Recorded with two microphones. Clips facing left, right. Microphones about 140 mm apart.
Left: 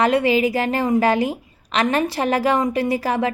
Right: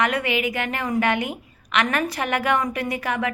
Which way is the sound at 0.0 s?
30° left (ahead or behind).